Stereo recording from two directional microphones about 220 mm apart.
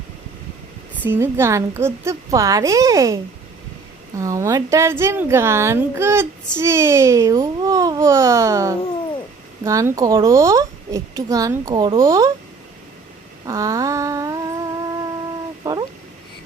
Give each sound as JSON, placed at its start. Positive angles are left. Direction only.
{"t": 1.0, "sound": "a woman's voice", "side_deg": -10}
{"t": 4.2, "sound": "a woman's voice", "side_deg": -15}
{"t": 13.4, "sound": "humming", "side_deg": -15}
{"t": 15.6, "sound": "a sound", "side_deg": -15}